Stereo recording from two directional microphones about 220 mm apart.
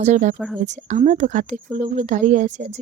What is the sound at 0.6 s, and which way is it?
Speech, 35° right (ahead or behind).